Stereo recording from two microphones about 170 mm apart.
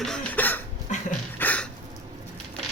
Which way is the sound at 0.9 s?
45° left (ahead or behind).